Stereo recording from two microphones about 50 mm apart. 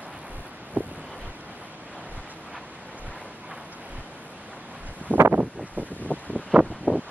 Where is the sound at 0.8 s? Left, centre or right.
Right.